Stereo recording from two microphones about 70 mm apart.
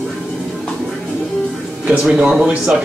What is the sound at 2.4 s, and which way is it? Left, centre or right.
Speech, centre.